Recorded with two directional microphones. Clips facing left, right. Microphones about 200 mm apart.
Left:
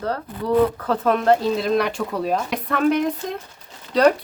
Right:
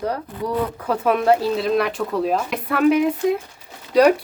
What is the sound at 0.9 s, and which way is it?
Speech, 10° right (ahead or behind).